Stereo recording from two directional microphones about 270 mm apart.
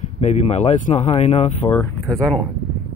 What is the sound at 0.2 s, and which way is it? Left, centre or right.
Speech, left.